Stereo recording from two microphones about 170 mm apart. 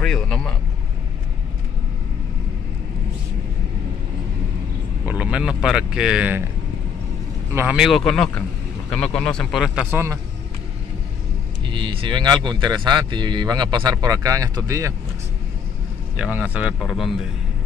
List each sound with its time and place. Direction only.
0.0 s speech: 5° left (ahead or behind)
5.0 s speech: 10° right (ahead or behind)
7.5 s speech: 5° right (ahead or behind)
11.6 s speech: 30° right (ahead or behind)
16.2 s a man's voice: 5° right (ahead or behind)